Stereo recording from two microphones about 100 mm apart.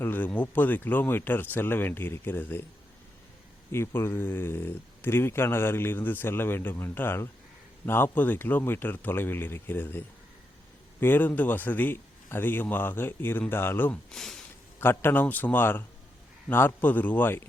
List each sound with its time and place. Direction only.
0.0 s speech: 20° left (ahead or behind)
3.7 s speech: 25° left (ahead or behind)
11.0 s speech: 20° left (ahead or behind)
14.1 s speech: 5° left (ahead or behind)
14.8 s speech: 25° left (ahead or behind)